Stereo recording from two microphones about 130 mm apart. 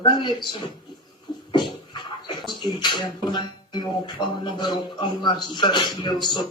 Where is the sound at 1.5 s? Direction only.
35° left (ahead or behind).